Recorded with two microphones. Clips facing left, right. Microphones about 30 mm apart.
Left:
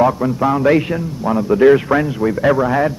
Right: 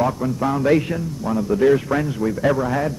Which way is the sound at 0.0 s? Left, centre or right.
Centre.